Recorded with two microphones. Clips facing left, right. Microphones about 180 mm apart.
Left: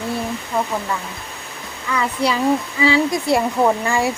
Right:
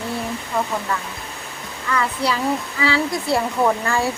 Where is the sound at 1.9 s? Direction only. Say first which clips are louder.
Left 2 dB; 15° left (ahead or behind).